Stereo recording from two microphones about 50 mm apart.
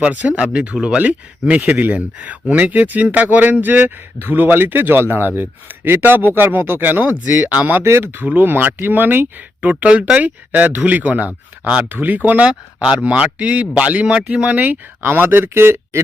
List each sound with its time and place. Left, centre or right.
0.0 s speech: right
12.4 s speech: centre; by 16.0 s right